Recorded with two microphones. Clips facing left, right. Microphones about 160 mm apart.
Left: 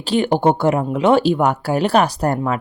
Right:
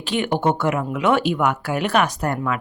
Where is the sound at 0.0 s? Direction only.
35° left (ahead or behind).